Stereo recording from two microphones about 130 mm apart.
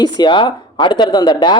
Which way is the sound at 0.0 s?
35° left (ahead or behind).